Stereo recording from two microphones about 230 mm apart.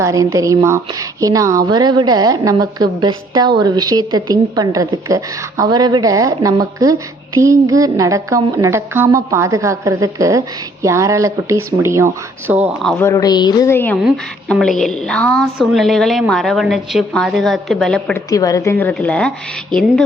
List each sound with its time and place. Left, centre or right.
0.0 s a woman's voice: centre
18.3 s a woman's voice: centre